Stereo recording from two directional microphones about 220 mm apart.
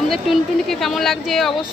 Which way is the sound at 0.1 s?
Centre (ahead or behind).